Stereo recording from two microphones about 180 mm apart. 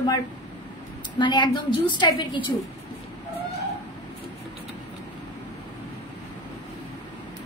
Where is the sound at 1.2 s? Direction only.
25° left (ahead or behind).